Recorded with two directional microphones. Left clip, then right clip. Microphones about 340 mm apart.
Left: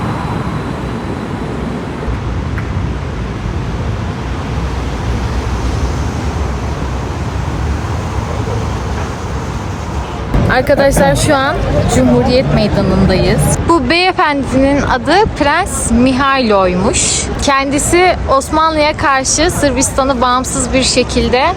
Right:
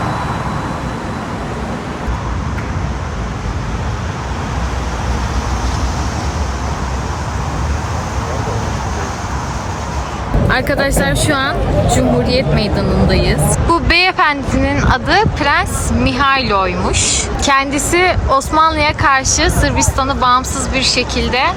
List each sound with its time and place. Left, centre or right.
10.5 s speech: centre